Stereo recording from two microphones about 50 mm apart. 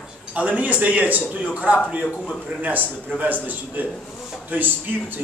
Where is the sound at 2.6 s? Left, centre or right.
Right.